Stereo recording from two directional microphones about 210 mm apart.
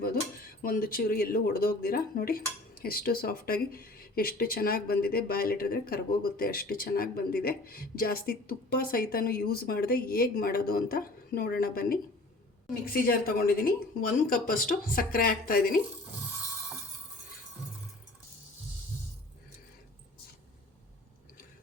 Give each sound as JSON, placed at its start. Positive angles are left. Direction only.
{"t": 0.6, "sound": "speech", "side_deg": 45}